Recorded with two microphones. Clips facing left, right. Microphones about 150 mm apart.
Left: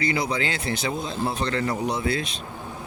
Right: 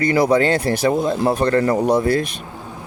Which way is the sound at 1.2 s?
90° right.